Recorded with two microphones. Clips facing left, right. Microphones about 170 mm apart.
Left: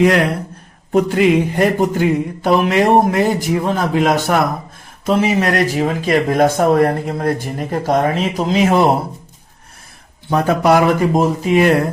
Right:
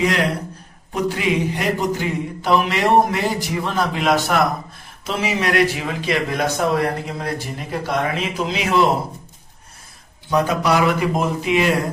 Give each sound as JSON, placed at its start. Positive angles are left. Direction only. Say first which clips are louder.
{"t": 0.9, "sound": "speech", "louder": "left 8 dB", "side_deg": 55}
{"t": 10.2, "sound": "speech", "louder": "left 5 dB", "side_deg": 55}